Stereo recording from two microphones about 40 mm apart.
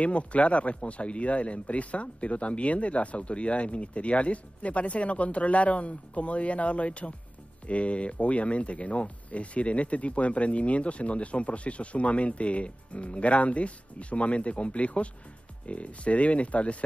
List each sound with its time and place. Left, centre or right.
0.0 s speech: left